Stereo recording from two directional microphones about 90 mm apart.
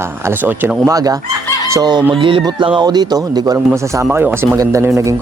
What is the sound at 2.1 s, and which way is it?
Speech, 70° right (ahead or behind).